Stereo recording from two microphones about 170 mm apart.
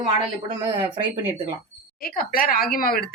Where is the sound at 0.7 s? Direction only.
30° right (ahead or behind).